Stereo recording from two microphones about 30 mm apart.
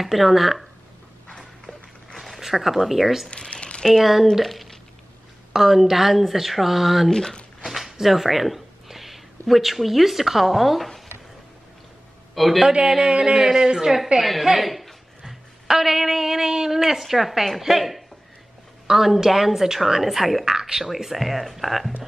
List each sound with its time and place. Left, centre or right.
0.0 s speech: centre
1.3 s a sound: centre
2.1 s a sound: centre
3.3 s speech: left
3.9 s speech: centre
7.1 s speech: centre
7.6 s speech: centre
12.4 s speech: centre
12.8 s a woman's voice: centre
14.4 s a woman's voice: centre
20.4 s speech: centre
20.8 s speech: centre